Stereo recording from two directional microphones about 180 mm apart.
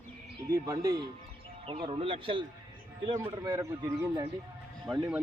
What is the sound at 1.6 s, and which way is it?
A man's voice, 30° right (ahead or behind).